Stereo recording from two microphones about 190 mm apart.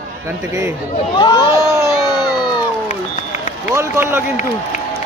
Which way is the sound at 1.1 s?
25° left (ahead or behind).